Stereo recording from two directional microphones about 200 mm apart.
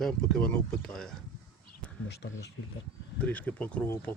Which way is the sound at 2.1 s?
55° left (ahead or behind).